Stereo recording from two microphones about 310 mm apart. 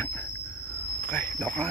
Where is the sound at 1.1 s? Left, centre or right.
Centre.